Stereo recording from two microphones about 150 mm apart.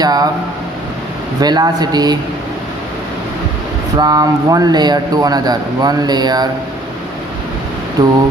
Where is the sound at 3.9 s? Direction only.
25° right (ahead or behind).